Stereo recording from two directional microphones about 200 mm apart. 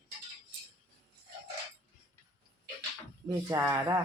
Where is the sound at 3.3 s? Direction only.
15° right (ahead or behind).